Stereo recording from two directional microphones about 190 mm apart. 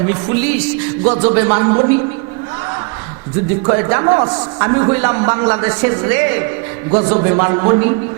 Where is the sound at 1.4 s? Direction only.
20° right (ahead or behind).